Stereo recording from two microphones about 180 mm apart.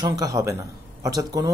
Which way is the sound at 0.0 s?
20° right (ahead or behind).